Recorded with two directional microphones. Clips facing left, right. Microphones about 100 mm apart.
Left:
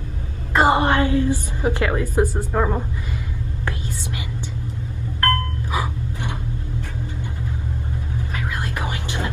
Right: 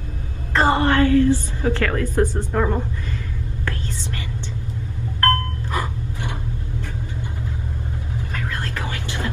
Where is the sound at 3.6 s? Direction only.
15° left (ahead or behind).